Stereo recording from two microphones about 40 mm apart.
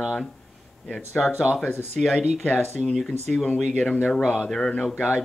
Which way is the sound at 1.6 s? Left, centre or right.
Left.